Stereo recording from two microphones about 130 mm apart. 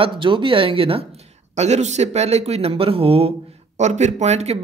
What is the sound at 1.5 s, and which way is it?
Speech, 60° right (ahead or behind).